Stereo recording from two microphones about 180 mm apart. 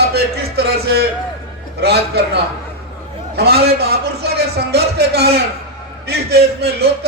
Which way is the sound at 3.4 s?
60° right (ahead or behind).